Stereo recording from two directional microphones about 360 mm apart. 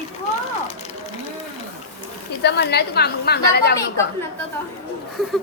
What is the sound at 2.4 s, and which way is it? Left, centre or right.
A woman's voice, left.